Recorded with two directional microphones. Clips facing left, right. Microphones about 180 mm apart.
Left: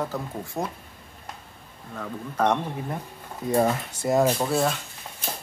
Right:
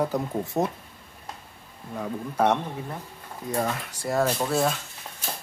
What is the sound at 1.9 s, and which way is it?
Speech, 10° right (ahead or behind).